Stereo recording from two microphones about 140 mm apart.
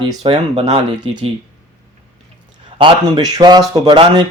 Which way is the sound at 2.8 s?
35° right (ahead or behind).